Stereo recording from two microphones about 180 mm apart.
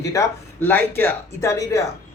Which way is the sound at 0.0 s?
15° left (ahead or behind).